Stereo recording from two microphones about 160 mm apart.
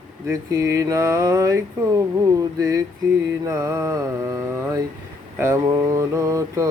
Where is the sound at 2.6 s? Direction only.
20° right (ahead or behind).